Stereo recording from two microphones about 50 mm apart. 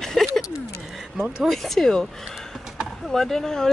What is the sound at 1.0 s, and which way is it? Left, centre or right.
Speech, centre.